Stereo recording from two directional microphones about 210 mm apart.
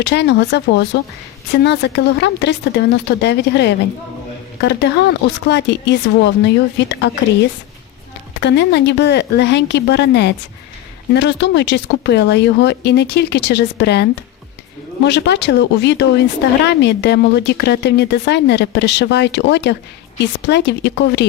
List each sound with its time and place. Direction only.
0.0 s speech: 55° left (ahead or behind)
8.4 s speech: 55° left (ahead or behind)